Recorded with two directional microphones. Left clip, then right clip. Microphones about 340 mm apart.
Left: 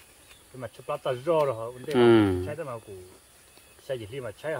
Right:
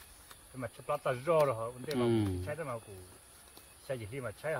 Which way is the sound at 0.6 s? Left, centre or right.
Left.